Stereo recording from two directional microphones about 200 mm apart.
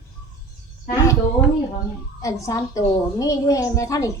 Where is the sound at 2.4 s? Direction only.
15° left (ahead or behind).